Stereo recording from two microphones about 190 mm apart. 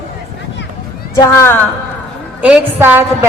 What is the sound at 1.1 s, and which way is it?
Speech, 15° left (ahead or behind).